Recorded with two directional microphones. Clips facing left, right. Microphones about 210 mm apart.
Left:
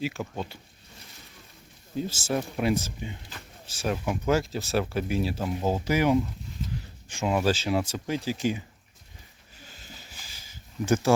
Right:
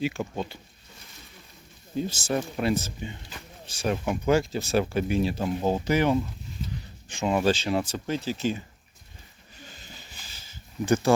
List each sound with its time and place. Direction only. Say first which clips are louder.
0.0 s speech: right 3 dB; centre (ahead or behind)
2.0 s speech: right 1 dB; 5° left (ahead or behind)
9.6 s a sound: even; 5° left (ahead or behind)